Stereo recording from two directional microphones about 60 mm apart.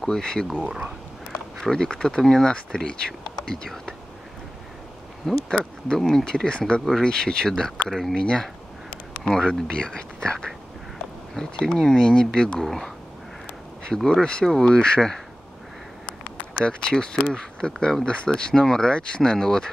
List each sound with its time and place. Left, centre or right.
0.0 s speech: centre
0.7 s speech: centre
1.6 s speech: centre
5.2 s speech: centre
16.6 s speech: centre